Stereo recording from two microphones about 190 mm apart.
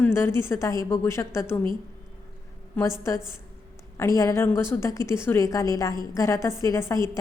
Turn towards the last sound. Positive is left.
turn(degrees=15)  # may be behind; listen again after turning